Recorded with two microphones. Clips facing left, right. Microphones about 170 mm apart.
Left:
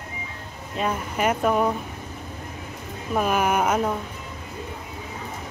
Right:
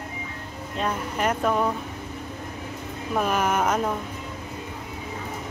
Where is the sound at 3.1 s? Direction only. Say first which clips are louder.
Left 2 dB; 5° left (ahead or behind).